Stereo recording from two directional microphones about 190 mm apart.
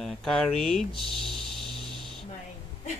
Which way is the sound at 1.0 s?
Centre (ahead or behind).